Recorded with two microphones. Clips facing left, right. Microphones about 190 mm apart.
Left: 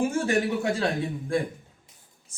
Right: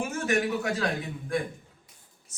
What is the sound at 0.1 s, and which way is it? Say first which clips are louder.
Speech: left 2 dB; 30° left (ahead or behind).